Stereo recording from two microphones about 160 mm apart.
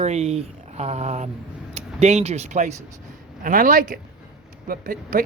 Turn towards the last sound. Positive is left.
turn(degrees=-60)  # may be behind; listen again after turning